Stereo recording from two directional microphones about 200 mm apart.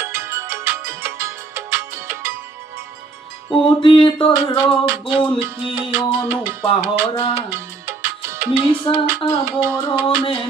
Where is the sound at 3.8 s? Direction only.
25° left (ahead or behind).